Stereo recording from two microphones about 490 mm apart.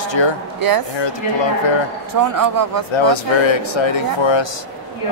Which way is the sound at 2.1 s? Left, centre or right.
Right.